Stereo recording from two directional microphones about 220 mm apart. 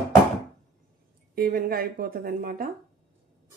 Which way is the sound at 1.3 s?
40° right (ahead or behind).